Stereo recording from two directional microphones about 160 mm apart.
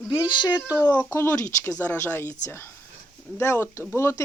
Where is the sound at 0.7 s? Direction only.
15° left (ahead or behind).